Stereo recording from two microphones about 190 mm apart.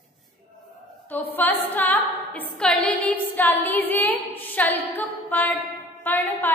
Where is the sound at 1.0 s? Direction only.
10° left (ahead or behind).